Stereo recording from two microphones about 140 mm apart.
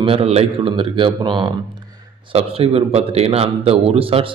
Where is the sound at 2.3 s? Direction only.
45° right (ahead or behind).